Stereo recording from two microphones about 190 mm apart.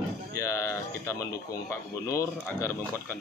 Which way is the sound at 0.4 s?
15° left (ahead or behind).